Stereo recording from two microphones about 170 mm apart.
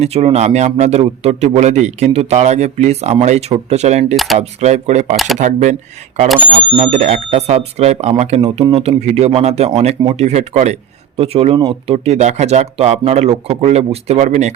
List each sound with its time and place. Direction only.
0.0 s a man's voice: 40° right (ahead or behind)
5.1 s speech: centre (ahead or behind)
5.4 s speech: 45° right (ahead or behind)
6.2 s speech: centre (ahead or behind)
6.5 s a man's voice: 35° right (ahead or behind)